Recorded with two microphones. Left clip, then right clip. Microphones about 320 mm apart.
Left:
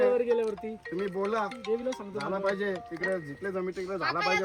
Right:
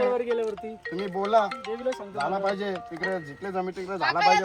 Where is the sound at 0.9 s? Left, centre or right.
Right.